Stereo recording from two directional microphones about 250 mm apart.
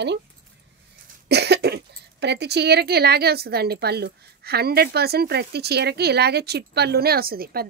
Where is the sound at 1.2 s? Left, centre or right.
Right.